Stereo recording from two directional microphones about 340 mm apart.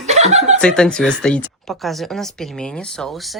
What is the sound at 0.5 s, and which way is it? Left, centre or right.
Speech, centre.